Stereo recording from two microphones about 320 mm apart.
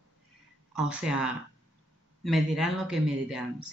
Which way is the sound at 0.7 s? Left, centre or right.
Centre.